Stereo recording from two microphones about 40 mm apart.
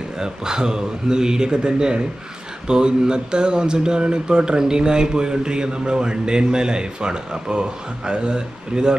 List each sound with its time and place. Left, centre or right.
0.2 s speech: centre